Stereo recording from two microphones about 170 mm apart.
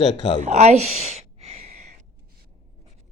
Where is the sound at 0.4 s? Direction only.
40° right (ahead or behind).